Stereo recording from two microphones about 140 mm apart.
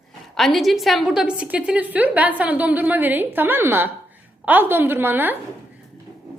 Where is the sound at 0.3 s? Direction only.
Centre (ahead or behind).